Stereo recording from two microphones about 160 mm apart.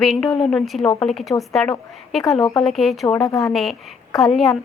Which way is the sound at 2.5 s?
Centre (ahead or behind).